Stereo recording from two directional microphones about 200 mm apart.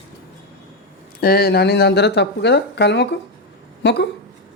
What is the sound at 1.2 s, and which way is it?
Speech, 50° left (ahead or behind).